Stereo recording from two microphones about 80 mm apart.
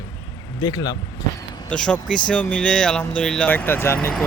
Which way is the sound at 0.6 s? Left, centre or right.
Left.